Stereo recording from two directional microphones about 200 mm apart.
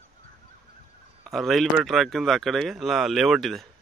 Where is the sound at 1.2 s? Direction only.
Centre (ahead or behind).